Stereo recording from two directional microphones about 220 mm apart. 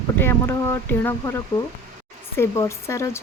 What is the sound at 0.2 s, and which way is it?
Speech, 10° left (ahead or behind).